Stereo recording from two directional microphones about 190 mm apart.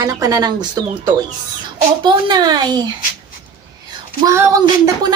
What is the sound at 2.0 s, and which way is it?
Speech, 25° right (ahead or behind).